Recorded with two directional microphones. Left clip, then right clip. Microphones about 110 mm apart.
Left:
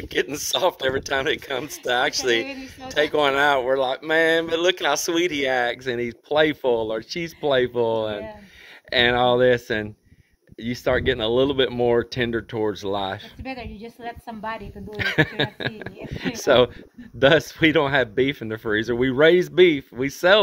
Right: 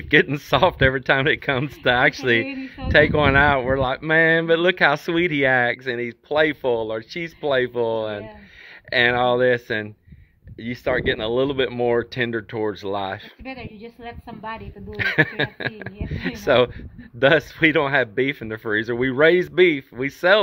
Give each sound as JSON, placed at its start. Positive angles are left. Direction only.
{"t": 0.2, "sound": "speech", "side_deg": 25}
{"t": 10.6, "sound": "speech", "side_deg": 40}